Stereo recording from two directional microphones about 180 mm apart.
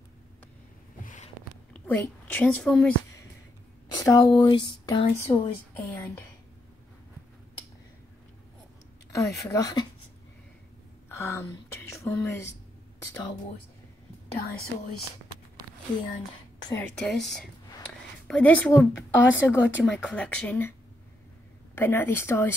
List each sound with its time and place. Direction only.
1.0 s a sound: 45° left (ahead or behind)
1.7 s a woman's voice: 10° left (ahead or behind)
4.0 s speech: 20° left (ahead or behind)
9.1 s speech: 15° left (ahead or behind)
11.1 s a woman's voice: 15° left (ahead or behind)
16.6 s speech: 15° left (ahead or behind)
17.0 s a woman's voice: centre (ahead or behind)
19.2 s speech: 90° left
19.8 s a woman's voice: 5° left (ahead or behind)
21.7 s a woman's voice: 15° left (ahead or behind)